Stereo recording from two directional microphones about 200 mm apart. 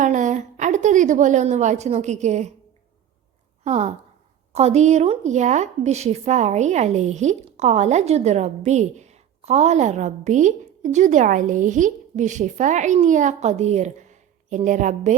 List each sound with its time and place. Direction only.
0.0 s a woman's voice: 40° right (ahead or behind)
3.6 s a woman's voice: 35° right (ahead or behind)